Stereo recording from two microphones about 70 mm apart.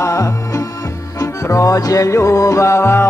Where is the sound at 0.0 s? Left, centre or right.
Left.